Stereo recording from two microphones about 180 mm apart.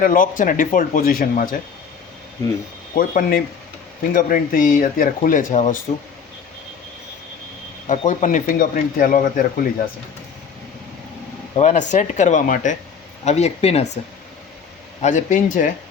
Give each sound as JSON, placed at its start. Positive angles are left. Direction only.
{"t": 0.0, "sound": "speech", "side_deg": 50}
{"t": 2.9, "sound": "speech", "side_deg": 50}
{"t": 7.9, "sound": "speech", "side_deg": 45}
{"t": 11.5, "sound": "speech", "side_deg": 40}
{"t": 15.0, "sound": "speech", "side_deg": 45}